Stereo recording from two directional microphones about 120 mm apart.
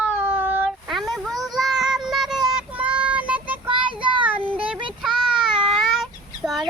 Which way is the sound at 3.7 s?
45° right (ahead or behind).